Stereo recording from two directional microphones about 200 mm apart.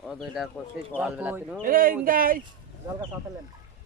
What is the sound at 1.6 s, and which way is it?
Speech, 45° right (ahead or behind).